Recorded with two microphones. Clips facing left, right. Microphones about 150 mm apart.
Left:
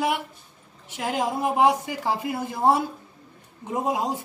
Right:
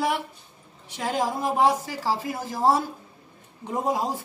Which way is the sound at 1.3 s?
15° left (ahead or behind).